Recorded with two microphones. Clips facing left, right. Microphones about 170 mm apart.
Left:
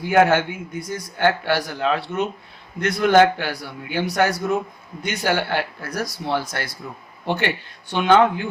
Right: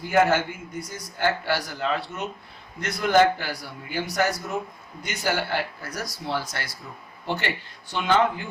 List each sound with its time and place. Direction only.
0.0 s a man's voice: 65° left (ahead or behind)